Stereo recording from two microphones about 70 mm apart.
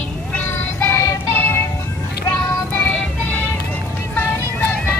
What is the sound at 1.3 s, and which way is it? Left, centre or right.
Music, left.